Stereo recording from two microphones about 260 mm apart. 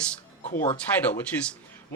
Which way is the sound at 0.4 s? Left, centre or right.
Left.